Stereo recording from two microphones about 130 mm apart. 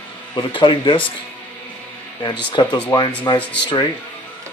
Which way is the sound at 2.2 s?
40° left (ahead or behind).